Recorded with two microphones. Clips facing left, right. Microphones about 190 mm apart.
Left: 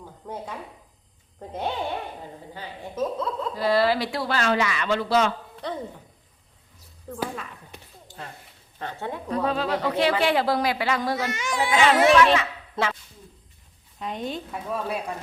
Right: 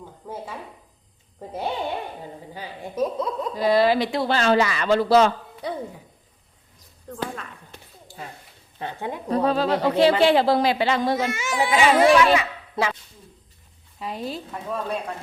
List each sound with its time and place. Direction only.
0.2 s a sound: 5° right (ahead or behind)
1.4 s speech: 5° right (ahead or behind); by 5.3 s 35° right (ahead or behind)
5.6 s speech: 10° right (ahead or behind)
7.1 s a woman's voice: 5° left (ahead or behind)
8.0 s a sound: 5° right (ahead or behind)
8.8 s speech: 15° right (ahead or behind)
9.3 s speech: 35° right (ahead or behind)
11.3 s a child's voice: 10° right (ahead or behind)
14.0 s a woman's voice: 5° right (ahead or behind)